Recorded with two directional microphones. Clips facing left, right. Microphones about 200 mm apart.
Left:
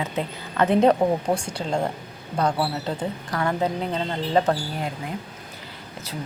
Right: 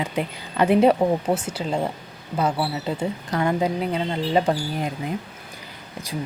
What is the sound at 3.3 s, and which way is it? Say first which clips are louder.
A woman's voice: right 2 dB; 20° right (ahead or behind).